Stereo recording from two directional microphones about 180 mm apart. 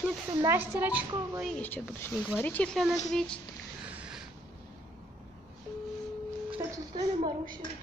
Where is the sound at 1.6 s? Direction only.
10° left (ahead or behind).